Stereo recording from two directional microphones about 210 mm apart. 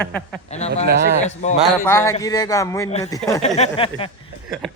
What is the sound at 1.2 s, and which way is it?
Speech, 35° left (ahead or behind).